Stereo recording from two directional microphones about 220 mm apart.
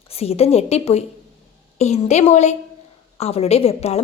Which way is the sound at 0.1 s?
25° left (ahead or behind).